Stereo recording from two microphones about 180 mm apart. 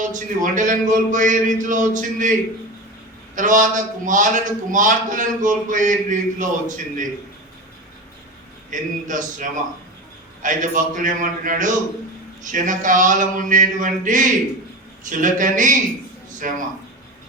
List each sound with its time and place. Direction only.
0.0 s a man's voice: 45° right (ahead or behind)
3.3 s a man's voice: 45° right (ahead or behind)
8.7 s a man's voice: 45° right (ahead or behind)